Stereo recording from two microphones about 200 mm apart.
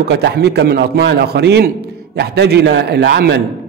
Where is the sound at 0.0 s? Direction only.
55° right (ahead or behind).